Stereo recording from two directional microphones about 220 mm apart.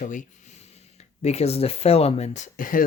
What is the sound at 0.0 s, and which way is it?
Speech, 35° left (ahead or behind).